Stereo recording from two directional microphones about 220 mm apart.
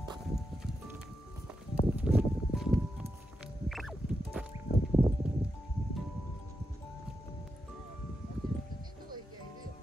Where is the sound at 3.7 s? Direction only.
Centre (ahead or behind).